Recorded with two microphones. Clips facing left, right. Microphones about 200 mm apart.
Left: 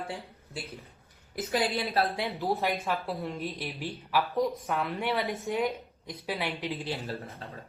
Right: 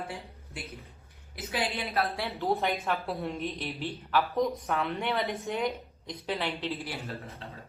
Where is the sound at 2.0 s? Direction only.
30° left (ahead or behind).